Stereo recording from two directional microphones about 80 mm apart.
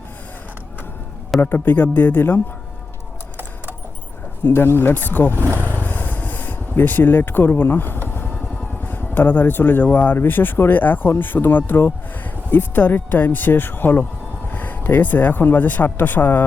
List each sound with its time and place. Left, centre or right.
1.4 s speech: left
4.4 s speech: left
5.6 s vehicle: left
8.0 s speech: left